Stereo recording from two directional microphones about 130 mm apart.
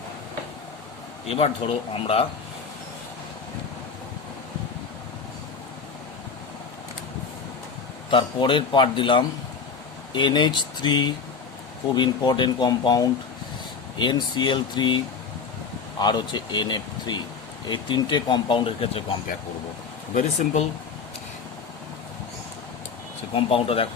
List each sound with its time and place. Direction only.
1.3 s speech: 50° left (ahead or behind)
8.1 s speech: 40° left (ahead or behind)
20.1 s speech: 65° left (ahead or behind)
23.3 s speech: 45° left (ahead or behind)